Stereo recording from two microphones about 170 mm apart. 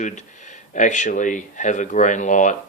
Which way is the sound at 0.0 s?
45° left (ahead or behind).